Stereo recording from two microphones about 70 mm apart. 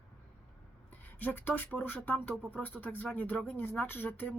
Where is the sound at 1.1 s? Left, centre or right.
Left.